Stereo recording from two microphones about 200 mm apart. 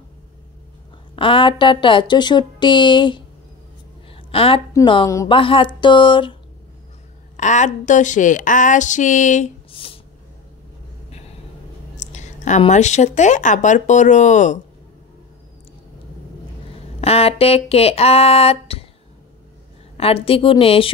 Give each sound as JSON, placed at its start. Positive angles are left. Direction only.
{"t": 1.1, "sound": "speech", "side_deg": 25}
{"t": 4.1, "sound": "a sound", "side_deg": 30}
{"t": 4.7, "sound": "speech", "side_deg": 20}
{"t": 7.3, "sound": "speech", "side_deg": 35}
{"t": 12.0, "sound": "speech", "side_deg": 35}
{"t": 17.0, "sound": "speech", "side_deg": 30}
{"t": 20.0, "sound": "speech", "side_deg": 30}